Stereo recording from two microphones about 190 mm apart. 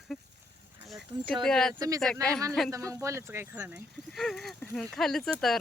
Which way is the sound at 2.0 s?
5° left (ahead or behind).